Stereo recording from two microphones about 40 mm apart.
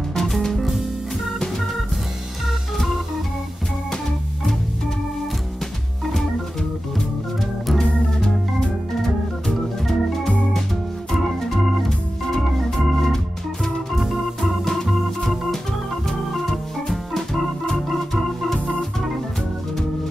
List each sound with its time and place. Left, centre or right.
0.1 s music: centre
7.8 s organ: centre
14.6 s organ: centre